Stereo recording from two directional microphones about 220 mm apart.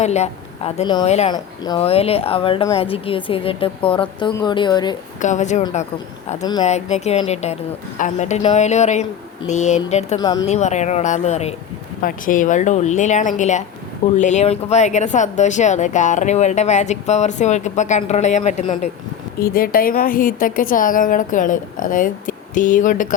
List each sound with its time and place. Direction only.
0.0 s speech: 30° left (ahead or behind)
1.3 s speech: 20° left (ahead or behind)
5.2 s speech: 35° left (ahead or behind)
10.2 s speech: 15° left (ahead or behind)
10.4 s speech: 30° left (ahead or behind)